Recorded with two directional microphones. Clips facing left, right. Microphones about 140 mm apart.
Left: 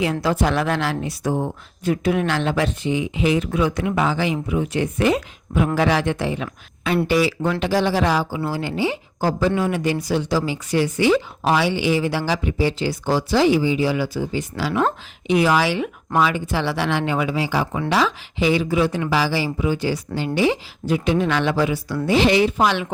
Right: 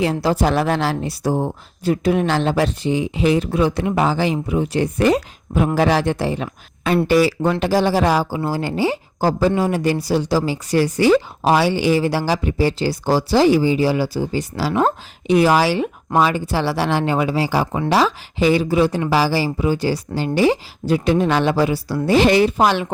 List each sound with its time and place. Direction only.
0.0 s speech: 35° right (ahead or behind)